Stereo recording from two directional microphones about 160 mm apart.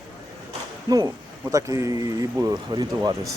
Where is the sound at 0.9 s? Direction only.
25° right (ahead or behind).